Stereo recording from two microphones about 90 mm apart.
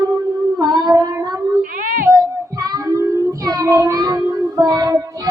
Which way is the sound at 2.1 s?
45° right (ahead or behind).